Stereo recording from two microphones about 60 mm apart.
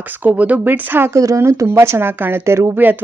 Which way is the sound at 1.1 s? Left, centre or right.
Right.